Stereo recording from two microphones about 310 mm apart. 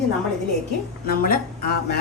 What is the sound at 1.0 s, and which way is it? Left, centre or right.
Speech, left.